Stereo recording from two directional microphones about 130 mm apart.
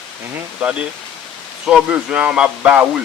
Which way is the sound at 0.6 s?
5° right (ahead or behind).